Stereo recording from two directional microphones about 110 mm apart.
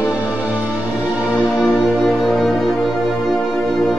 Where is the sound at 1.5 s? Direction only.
15° left (ahead or behind).